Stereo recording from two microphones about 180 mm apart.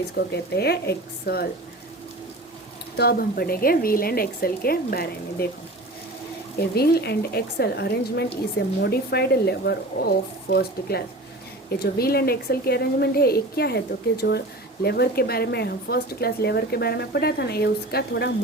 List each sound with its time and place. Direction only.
0.3 s speech: 65° left (ahead or behind)
3.0 s speech: 60° left (ahead or behind)
6.6 s speech: 60° left (ahead or behind)